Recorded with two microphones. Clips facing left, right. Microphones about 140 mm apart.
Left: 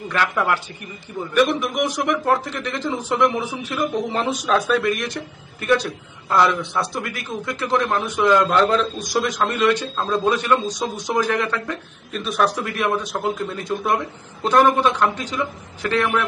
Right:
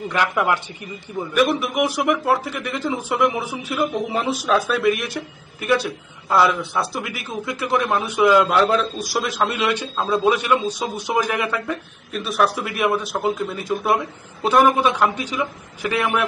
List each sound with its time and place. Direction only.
0.1 s a man's voice: 15° right (ahead or behind)
1.3 s a man's voice: 5° right (ahead or behind)